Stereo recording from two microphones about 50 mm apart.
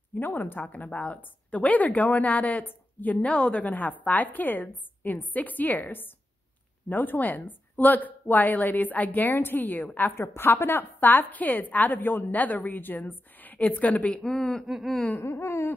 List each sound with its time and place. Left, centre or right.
0.1 s a woman's voice: left
3.3 s speech: centre
3.5 s a woman's voice: left
10.1 s a woman's voice: left
14.1 s speech: centre
14.7 s a sound: centre
15.1 s laughter: left
15.4 s laughter: left